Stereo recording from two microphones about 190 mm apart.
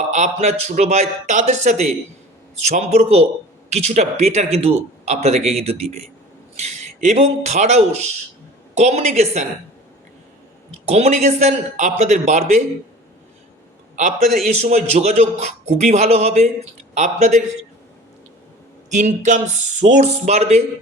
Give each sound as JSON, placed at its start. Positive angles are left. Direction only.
{"t": 0.1, "sound": "speech", "side_deg": -35}
{"t": 10.8, "sound": "speech", "side_deg": -35}
{"t": 14.0, "sound": "speech", "side_deg": -40}
{"t": 18.9, "sound": "speech", "side_deg": -40}